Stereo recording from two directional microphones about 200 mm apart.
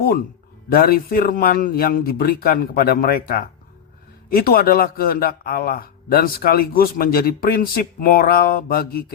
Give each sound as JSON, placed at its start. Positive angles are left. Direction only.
{"t": 0.7, "sound": "a man's voice", "side_deg": 45}